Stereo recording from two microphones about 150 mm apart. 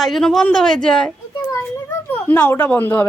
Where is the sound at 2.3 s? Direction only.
15° left (ahead or behind).